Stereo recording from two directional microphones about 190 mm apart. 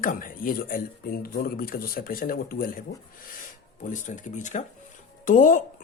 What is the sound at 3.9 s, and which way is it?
A man's voice, 40° left (ahead or behind).